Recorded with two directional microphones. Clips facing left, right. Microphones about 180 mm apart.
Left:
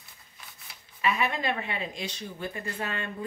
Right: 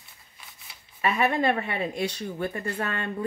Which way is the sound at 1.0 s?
55° right (ahead or behind).